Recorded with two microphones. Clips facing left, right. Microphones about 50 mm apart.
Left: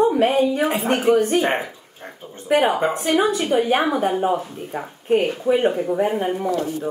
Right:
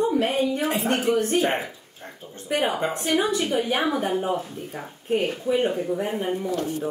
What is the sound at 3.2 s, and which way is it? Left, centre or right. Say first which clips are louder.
A woman's voice: left 6 dB; left.